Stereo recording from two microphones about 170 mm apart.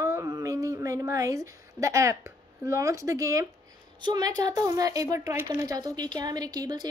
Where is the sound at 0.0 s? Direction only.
15° right (ahead or behind).